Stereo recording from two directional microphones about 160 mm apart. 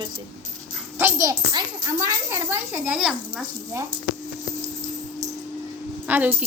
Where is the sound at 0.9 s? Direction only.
15° right (ahead or behind).